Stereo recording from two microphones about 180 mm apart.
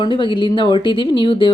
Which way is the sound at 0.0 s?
25° left (ahead or behind).